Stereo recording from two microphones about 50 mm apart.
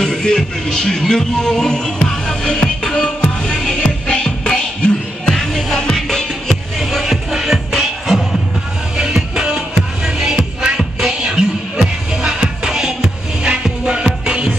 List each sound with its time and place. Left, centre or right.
0.0 s music: centre
5.3 s music: centre
8.9 s music: centre